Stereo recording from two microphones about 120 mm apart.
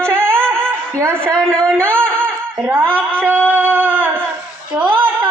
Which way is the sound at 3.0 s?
15° right (ahead or behind).